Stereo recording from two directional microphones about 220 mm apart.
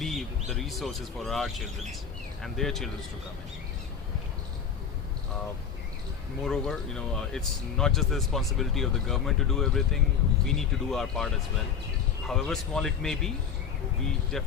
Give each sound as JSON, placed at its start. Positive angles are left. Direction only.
{"t": 0.0, "sound": "speech", "side_deg": 0}
{"t": 6.4, "sound": "speech", "side_deg": 0}
{"t": 14.3, "sound": "speech", "side_deg": 0}